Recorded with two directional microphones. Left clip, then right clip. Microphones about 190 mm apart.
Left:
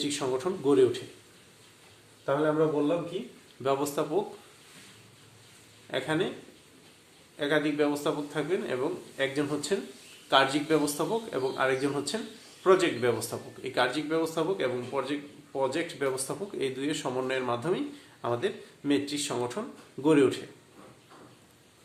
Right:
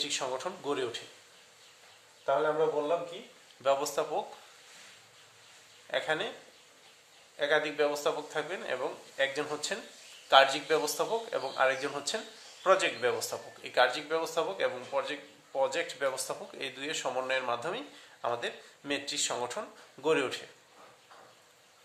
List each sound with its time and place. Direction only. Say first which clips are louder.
0.0 s a man's voice: left 3 dB; 15° right (ahead or behind)
2.2 s a man's voice: left 2 dB; 15° right (ahead or behind)
5.9 s a man's voice: left 2 dB; 15° right (ahead or behind)
7.3 s a man's voice: left 1 dB; 20° right (ahead or behind)